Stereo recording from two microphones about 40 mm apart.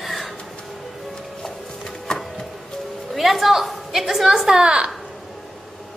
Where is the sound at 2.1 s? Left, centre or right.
Centre.